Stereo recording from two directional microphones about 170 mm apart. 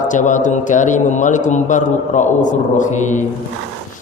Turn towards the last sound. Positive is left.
turn(degrees=45)  # may be behind; listen again after turning